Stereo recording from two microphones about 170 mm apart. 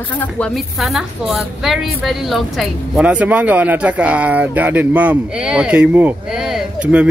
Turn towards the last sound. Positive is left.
turn(degrees=-5)  # may be behind; listen again after turning